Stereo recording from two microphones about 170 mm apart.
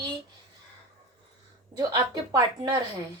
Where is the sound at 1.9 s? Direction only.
25° right (ahead or behind).